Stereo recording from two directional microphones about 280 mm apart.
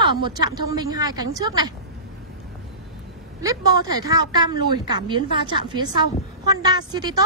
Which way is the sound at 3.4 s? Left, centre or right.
Centre.